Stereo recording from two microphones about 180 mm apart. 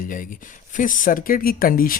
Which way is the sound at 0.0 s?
50° left (ahead or behind).